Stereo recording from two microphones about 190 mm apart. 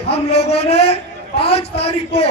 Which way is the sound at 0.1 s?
30° left (ahead or behind).